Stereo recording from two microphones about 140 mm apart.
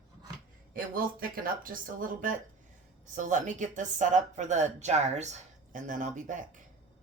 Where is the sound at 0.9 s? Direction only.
90° right.